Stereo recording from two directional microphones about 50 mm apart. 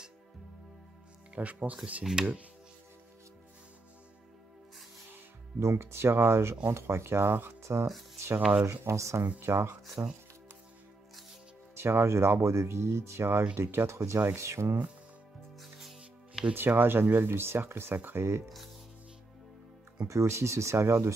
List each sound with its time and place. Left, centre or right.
1.3 s speech: right
2.2 s speech: centre
5.6 s speech: right
6.7 s speech: right
7.6 s speech: right
8.6 s speech: right
9.4 s speech: right
10.0 s speech: right
11.7 s speech: right
15.6 s music: centre
16.5 s speech: right
20.1 s speech: right